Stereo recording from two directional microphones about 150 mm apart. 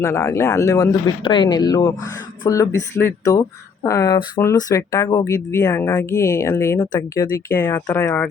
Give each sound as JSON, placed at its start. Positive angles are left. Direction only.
{"t": 0.0, "sound": "speech", "side_deg": 20}
{"t": 7.5, "sound": "speech", "side_deg": 10}